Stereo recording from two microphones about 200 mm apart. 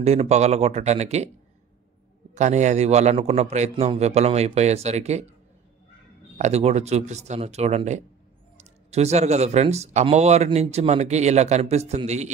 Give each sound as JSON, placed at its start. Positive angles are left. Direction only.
{"t": 0.0, "sound": "speech", "side_deg": -30}
{"t": 2.3, "sound": "speech", "side_deg": -35}
{"t": 6.3, "sound": "speech", "side_deg": -35}